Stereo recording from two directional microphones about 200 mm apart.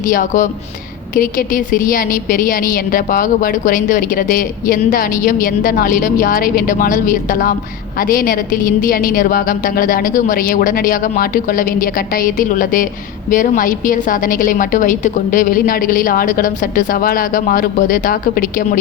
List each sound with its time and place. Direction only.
0.1 s a woman's voice: 45° left (ahead or behind)